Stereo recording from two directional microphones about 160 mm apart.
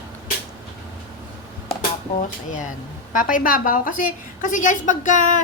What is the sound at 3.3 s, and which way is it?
A woman's voice, 60° left (ahead or behind).